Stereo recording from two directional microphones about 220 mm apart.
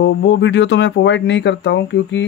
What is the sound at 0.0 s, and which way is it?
Speech, 55° left (ahead or behind).